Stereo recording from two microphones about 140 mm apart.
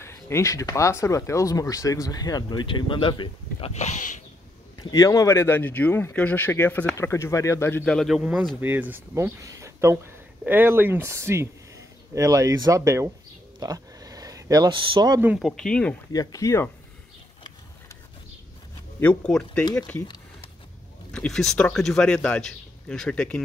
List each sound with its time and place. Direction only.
0.0 s speech: 20° left (ahead or behind); by 3.7 s 35° left (ahead or behind)
3.7 s speech: 55° left (ahead or behind)
4.7 s speech: 25° left (ahead or behind)
7.8 s speech: 5° left (ahead or behind)
8.2 s speech: 10° right (ahead or behind)
13.6 s a sound: 25° right (ahead or behind)
14.7 s speech: 35° right (ahead or behind)
15.3 s speech: centre (ahead or behind)
16.1 s speech: 25° left (ahead or behind)
18.9 s speech: 5° left (ahead or behind)
21.1 s speech: 5° left (ahead or behind)